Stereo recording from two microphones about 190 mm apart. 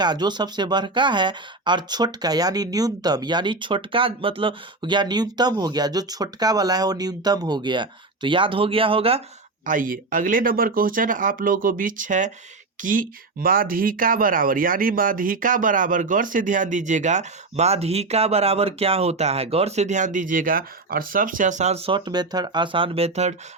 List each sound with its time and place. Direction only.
0.0 s speech: 20° right (ahead or behind)
9.6 s speech: 45° right (ahead or behind)